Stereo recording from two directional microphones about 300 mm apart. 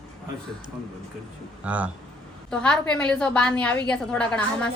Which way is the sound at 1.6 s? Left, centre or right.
Centre.